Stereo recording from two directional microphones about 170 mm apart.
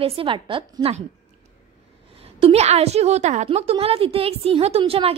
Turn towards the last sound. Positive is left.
turn(degrees=-35)  # may be behind; listen again after turning